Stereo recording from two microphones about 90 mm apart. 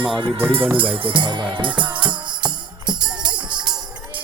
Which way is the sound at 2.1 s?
55° right (ahead or behind).